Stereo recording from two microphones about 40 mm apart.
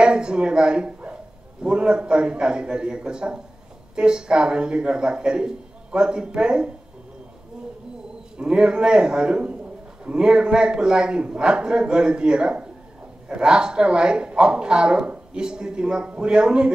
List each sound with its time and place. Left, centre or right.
0.0 s a man's voice: right
8.4 s a man's voice: right